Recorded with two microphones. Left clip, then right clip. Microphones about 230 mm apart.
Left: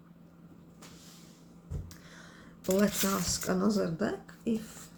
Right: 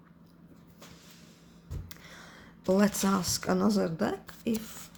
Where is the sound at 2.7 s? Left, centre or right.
Right.